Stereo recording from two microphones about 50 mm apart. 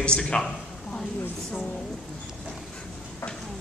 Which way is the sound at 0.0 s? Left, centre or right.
Centre.